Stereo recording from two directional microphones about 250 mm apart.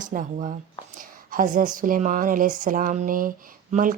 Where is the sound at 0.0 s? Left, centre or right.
Right.